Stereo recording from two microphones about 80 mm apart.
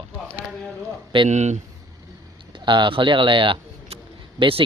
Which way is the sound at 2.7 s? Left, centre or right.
Right.